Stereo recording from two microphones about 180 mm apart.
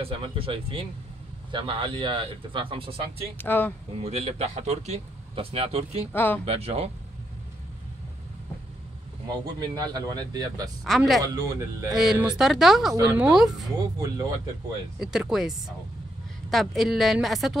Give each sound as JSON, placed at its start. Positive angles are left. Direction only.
{"t": 0.0, "sound": "speech", "side_deg": -30}
{"t": 3.3, "sound": "speech", "side_deg": 10}
{"t": 4.0, "sound": "speech", "side_deg": -35}
{"t": 6.1, "sound": "speech", "side_deg": 10}
{"t": 6.4, "sound": "speech", "side_deg": -35}
{"t": 9.6, "sound": "speech", "side_deg": -20}
{"t": 10.8, "sound": "a woman's voice", "side_deg": 0}
{"t": 11.2, "sound": "speech", "side_deg": -20}
{"t": 12.0, "sound": "a woman's voice", "side_deg": 0}
{"t": 13.9, "sound": "speech", "side_deg": -20}
{"t": 15.0, "sound": "a woman's voice", "side_deg": 0}